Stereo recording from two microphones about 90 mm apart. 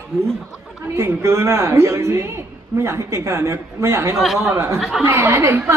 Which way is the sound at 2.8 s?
35° right (ahead or behind).